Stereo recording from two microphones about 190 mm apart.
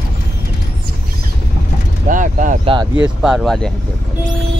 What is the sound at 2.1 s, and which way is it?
Speech, 45° right (ahead or behind).